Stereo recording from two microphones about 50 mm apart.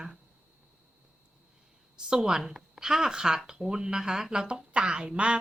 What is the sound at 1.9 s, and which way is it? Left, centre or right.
A woman's voice, centre.